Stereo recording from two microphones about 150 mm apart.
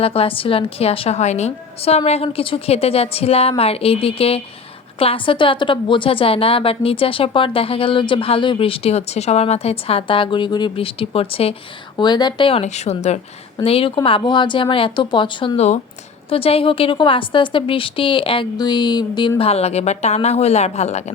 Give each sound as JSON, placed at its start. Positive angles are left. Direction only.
{"t": 0.0, "sound": "a woman's voice", "side_deg": 40}
{"t": 11.9, "sound": "a woman's voice", "side_deg": 30}